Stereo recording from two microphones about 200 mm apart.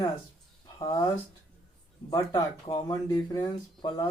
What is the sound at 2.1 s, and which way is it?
Speech, 20° left (ahead or behind).